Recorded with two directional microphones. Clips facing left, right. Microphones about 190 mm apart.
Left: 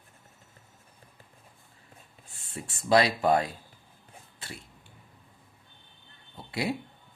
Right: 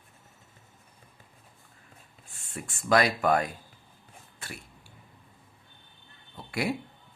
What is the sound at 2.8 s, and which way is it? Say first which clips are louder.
Speech: left 1 dB; 30° left (ahead or behind).